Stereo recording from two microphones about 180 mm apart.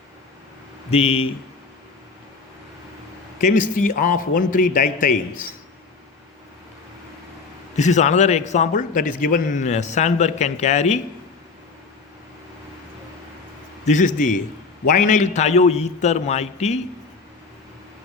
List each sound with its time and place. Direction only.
0.9 s a man's voice: 35° left (ahead or behind)
3.4 s a man's voice: 45° left (ahead or behind)
7.8 s a man's voice: 40° left (ahead or behind)
13.8 s a man's voice: 45° left (ahead or behind)